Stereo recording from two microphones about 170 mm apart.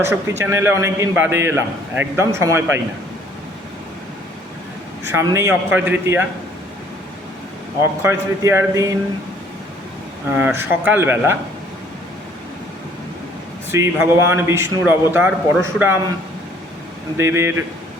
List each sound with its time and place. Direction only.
0.0 s speech: 15° right (ahead or behind)
5.1 s speech: 15° right (ahead or behind)
8.0 s speech: 15° right (ahead or behind)
10.3 s speech: 10° right (ahead or behind)
13.7 s speech: 15° right (ahead or behind)
17.2 s speech: 15° right (ahead or behind)